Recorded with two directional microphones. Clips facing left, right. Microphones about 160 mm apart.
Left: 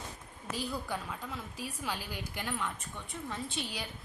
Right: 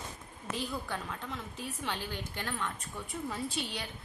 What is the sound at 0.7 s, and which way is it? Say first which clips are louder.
A woman's voice: even; 5° left (ahead or behind).